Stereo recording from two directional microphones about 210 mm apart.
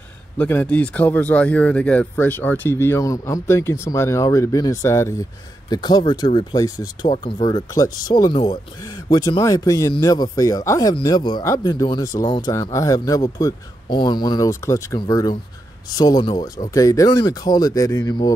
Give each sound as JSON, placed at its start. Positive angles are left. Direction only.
{"t": 0.4, "sound": "speech", "side_deg": 10}